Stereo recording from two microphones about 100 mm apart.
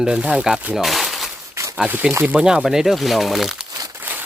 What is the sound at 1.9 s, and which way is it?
Speech, 20° right (ahead or behind).